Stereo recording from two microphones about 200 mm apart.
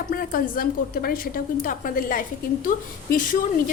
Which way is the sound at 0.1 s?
45° left (ahead or behind).